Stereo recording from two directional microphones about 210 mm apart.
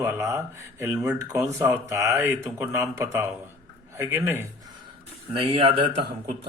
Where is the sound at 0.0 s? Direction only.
10° right (ahead or behind).